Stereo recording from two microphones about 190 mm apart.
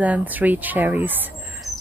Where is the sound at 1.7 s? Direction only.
35° left (ahead or behind).